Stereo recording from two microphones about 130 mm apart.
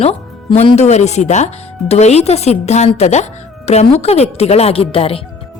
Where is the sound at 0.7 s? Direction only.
60° left (ahead or behind).